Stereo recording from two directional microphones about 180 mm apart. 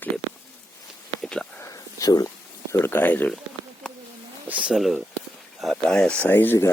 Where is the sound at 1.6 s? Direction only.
15° left (ahead or behind).